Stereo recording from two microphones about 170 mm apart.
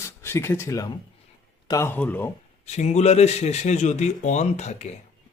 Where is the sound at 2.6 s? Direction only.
40° left (ahead or behind).